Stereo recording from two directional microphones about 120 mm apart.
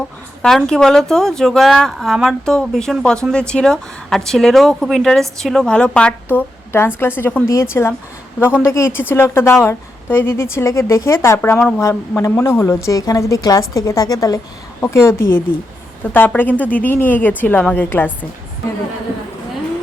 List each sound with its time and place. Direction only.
0.4 s a woman's voice: 5° left (ahead or behind)